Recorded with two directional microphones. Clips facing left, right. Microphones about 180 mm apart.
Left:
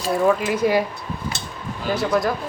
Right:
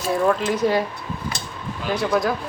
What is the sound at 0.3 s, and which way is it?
Speech, 5° left (ahead or behind).